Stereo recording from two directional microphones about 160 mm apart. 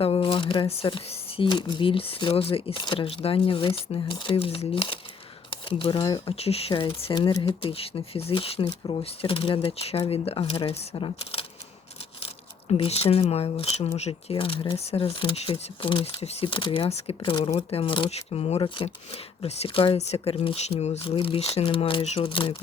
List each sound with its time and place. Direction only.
0.0 s speech: 35° left (ahead or behind)